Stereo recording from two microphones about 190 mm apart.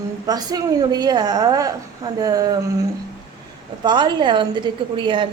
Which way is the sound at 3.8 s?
25° right (ahead or behind).